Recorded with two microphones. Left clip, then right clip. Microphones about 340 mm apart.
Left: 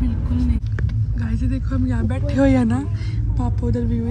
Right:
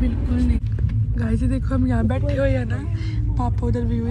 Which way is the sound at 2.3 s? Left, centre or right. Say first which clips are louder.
Left 7 dB; centre.